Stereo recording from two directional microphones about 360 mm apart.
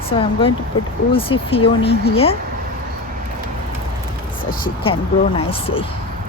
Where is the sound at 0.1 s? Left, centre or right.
Centre.